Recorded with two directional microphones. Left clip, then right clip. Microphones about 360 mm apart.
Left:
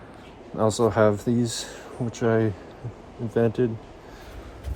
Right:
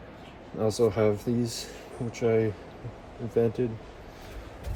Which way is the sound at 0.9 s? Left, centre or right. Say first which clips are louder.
Left 5 dB; centre.